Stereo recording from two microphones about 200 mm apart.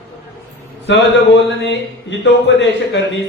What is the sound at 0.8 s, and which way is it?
A man's voice, 60° left (ahead or behind).